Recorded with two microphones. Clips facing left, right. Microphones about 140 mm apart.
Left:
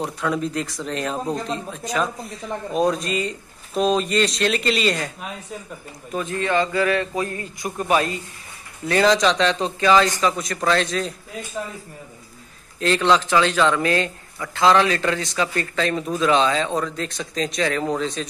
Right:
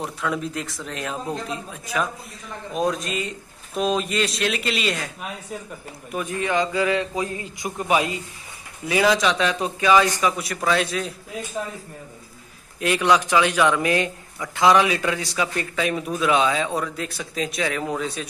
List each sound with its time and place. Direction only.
0.0 s a man's voice: centre (ahead or behind)
6.1 s a man's voice: 15° right (ahead or behind)
12.8 s a man's voice: 10° right (ahead or behind)